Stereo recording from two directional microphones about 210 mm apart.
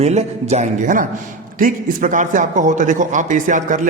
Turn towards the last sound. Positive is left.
turn(degrees=-35)  # may be behind; listen again after turning